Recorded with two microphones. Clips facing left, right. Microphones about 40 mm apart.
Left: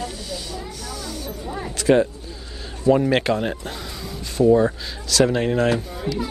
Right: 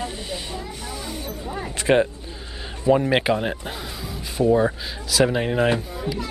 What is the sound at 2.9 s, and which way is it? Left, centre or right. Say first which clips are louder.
Speech: left 1 dB; centre.